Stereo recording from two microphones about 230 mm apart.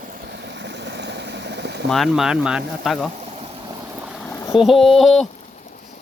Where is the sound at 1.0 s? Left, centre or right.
Right.